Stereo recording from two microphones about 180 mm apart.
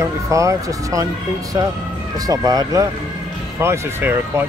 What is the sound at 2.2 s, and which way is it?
Speech, 20° right (ahead or behind).